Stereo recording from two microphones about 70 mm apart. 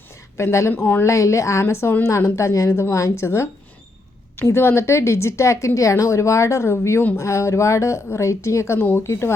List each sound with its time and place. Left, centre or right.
0.3 s a woman's voice: left
0.7 s a woman's voice: left
1.1 s a woman's voice: left